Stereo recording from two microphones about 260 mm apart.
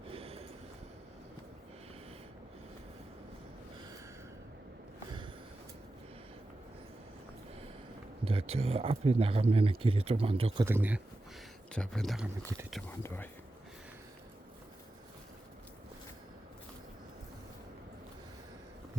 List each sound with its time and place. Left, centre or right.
0.1 s a sound: right
8.2 s speech: right
10.7 s speech: centre
13.0 s speech: centre